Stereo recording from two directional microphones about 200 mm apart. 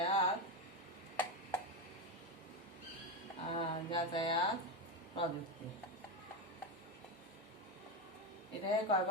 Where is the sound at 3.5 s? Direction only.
25° left (ahead or behind).